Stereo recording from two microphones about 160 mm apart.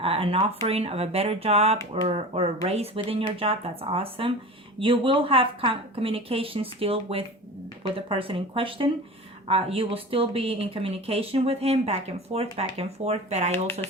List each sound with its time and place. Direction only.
0.0 s speech: 35° right (ahead or behind)